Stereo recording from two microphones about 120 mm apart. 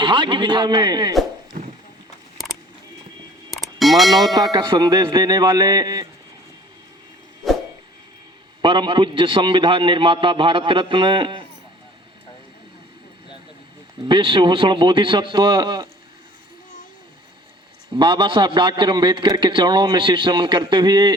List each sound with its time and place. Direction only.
0.0 s a man's voice: 40° right (ahead or behind)
3.5 s a sound: centre (ahead or behind)
4.4 s a man's voice: 30° right (ahead or behind)
8.6 s a man's voice: 40° right (ahead or behind)
14.1 s a man's voice: 45° right (ahead or behind)
17.9 s a man's voice: 40° right (ahead or behind)